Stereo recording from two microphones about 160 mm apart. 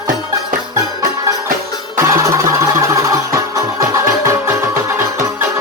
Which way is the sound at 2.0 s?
20° right (ahead or behind).